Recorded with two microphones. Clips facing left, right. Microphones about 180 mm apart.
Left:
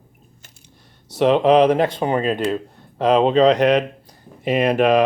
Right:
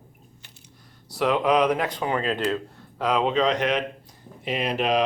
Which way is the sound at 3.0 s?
30° left (ahead or behind).